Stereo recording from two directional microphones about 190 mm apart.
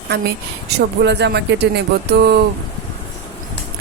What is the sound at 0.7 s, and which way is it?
Speech, 65° right (ahead or behind).